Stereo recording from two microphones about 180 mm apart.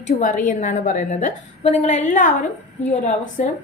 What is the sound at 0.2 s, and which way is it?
A woman's voice, 45° left (ahead or behind).